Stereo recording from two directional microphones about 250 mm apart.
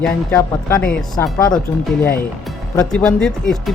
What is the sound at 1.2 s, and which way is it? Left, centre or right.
Speech, centre.